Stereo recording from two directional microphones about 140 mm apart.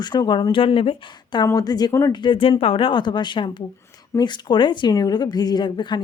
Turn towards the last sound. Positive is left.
turn(degrees=30)  # may be behind; listen again after turning